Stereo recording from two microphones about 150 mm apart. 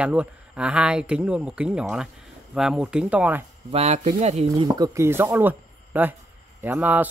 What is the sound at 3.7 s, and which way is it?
Speech, 45° right (ahead or behind).